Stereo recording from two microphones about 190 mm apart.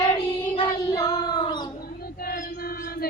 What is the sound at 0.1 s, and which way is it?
Child singing, 25° left (ahead or behind).